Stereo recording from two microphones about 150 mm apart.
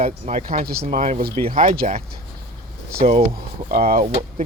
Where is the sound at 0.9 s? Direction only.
45° right (ahead or behind).